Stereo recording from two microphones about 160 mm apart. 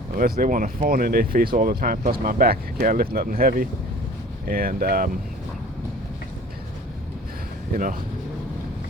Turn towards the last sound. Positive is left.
turn(degrees=-60)  # may be behind; listen again after turning